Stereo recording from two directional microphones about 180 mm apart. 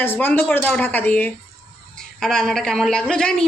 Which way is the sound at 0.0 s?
10° left (ahead or behind).